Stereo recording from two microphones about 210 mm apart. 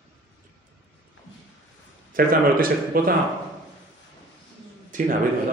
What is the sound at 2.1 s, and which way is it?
A man's voice, 45° right (ahead or behind).